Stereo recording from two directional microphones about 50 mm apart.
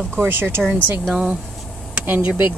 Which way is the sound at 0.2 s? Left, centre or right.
Right.